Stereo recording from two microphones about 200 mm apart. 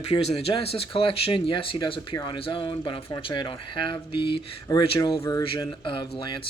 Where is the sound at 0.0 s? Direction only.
30° left (ahead or behind).